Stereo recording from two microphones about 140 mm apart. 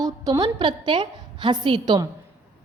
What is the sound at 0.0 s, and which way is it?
A woman's voice, 25° right (ahead or behind).